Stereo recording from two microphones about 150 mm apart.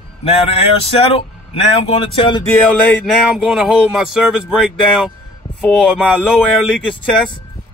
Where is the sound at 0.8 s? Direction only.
40° left (ahead or behind).